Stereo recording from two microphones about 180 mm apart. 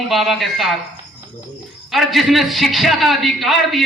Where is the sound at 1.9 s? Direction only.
Centre (ahead or behind).